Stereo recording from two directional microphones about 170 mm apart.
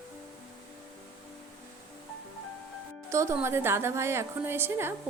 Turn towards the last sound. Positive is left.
turn(degrees=-15)  # may be behind; listen again after turning